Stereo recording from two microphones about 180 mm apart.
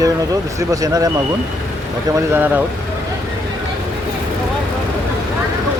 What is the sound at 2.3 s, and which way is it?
Speech, 10° right (ahead or behind).